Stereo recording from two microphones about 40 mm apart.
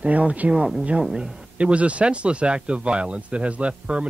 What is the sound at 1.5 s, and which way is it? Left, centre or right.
Speech, right.